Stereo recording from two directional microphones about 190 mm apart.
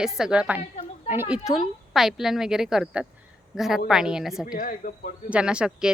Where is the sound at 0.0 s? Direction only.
5° right (ahead or behind).